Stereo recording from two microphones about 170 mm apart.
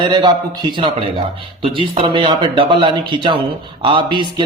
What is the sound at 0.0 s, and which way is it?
Speech, 25° right (ahead or behind).